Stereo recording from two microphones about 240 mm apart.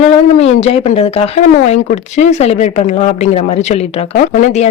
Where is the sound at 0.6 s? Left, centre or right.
Left.